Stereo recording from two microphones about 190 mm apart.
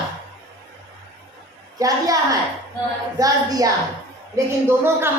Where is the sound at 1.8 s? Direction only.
20° right (ahead or behind).